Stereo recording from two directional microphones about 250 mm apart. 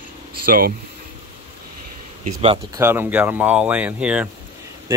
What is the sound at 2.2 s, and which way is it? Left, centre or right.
Speech, right.